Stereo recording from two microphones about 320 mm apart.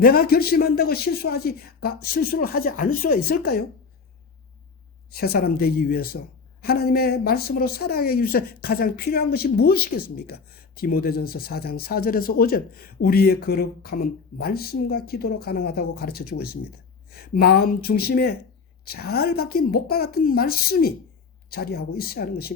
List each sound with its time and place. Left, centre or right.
0.0 s speech: left
5.1 s speech: left